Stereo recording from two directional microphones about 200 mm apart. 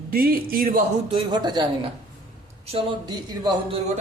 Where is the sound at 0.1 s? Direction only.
45° right (ahead or behind).